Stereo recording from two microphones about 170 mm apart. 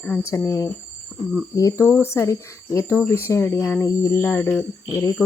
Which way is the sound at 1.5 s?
20° left (ahead or behind).